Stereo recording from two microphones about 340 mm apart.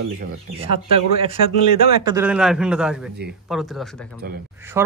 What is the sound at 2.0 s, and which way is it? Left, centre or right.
Speech, centre.